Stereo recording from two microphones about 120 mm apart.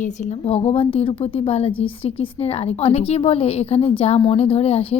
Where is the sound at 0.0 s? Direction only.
60° left (ahead or behind).